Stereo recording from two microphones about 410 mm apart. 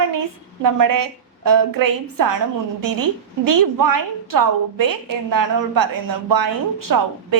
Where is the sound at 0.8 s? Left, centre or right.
Right.